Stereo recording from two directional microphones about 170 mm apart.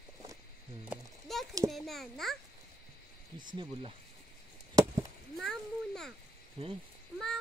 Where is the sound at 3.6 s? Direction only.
35° right (ahead or behind).